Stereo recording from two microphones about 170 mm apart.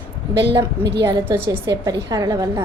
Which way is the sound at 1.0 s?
20° right (ahead or behind).